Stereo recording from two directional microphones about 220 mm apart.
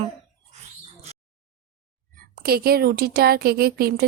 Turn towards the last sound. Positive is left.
turn(degrees=-45)  # may be behind; listen again after turning